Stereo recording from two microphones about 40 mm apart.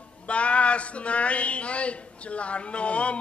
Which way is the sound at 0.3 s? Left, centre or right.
Left.